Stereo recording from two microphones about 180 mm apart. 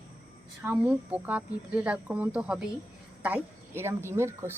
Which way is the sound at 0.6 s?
10° right (ahead or behind).